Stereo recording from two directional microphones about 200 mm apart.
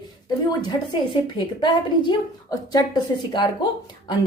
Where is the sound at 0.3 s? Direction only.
20° left (ahead or behind).